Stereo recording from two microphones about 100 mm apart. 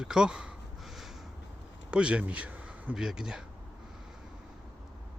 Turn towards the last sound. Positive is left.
turn(degrees=-5)  # may be behind; listen again after turning